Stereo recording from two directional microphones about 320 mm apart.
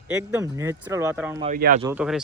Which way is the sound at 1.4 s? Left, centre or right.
Right.